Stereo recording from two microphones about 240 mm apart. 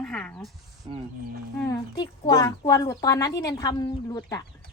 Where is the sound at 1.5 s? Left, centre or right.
Centre.